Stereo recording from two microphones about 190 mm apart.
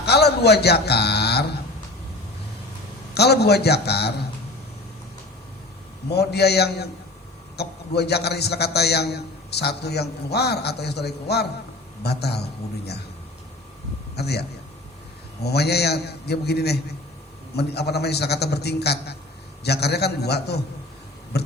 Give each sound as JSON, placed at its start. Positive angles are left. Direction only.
{"t": 0.0, "sound": "a man's voice", "side_deg": 60}
{"t": 3.2, "sound": "a man's voice", "side_deg": 60}
{"t": 6.1, "sound": "a man's voice", "side_deg": 60}
{"t": 14.2, "sound": "a man's voice", "side_deg": 60}
{"t": 15.4, "sound": "a man's voice", "side_deg": 60}